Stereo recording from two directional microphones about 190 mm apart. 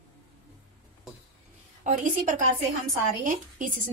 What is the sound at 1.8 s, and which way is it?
A woman's voice, 40° right (ahead or behind).